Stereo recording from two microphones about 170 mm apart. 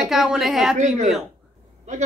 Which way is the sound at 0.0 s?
Centre (ahead or behind).